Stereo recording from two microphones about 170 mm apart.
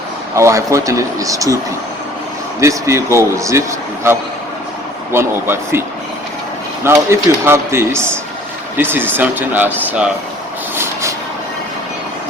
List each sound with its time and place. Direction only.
0.3 s speech: 20° right (ahead or behind)
2.6 s speech: 15° right (ahead or behind)
5.1 s speech: 15° right (ahead or behind)
6.8 s speech: 15° right (ahead or behind)